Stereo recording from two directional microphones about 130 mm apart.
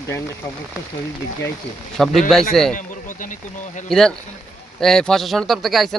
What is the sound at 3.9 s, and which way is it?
Speech, 5° left (ahead or behind).